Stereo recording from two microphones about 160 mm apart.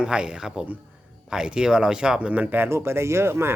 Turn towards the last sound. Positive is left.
turn(degrees=-15)  # may be behind; listen again after turning